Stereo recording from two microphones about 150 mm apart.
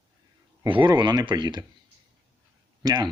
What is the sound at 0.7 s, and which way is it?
Speech, 30° right (ahead or behind).